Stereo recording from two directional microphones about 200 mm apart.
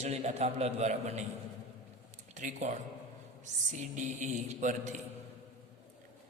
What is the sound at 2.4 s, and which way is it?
A man's voice, 35° right (ahead or behind).